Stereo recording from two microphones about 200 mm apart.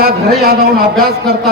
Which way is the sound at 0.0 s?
50° right (ahead or behind).